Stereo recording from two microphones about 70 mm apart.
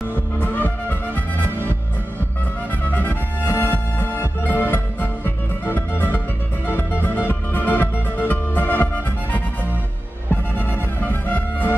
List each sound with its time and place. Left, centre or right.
0.4 s music: left
2.9 s music: left
10.7 s music: left